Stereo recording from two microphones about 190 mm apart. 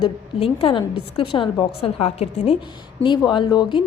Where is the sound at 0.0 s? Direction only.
30° left (ahead or behind).